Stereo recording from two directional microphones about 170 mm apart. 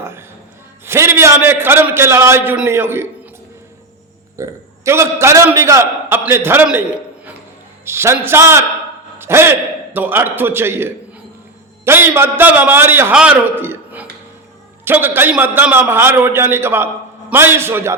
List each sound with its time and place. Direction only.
0.0 s a sound: 15° right (ahead or behind)
0.9 s a man's voice: 15° right (ahead or behind)
4.4 s a man's voice: 15° right (ahead or behind)